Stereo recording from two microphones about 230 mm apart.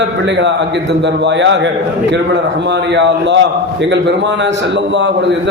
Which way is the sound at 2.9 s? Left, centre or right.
Right.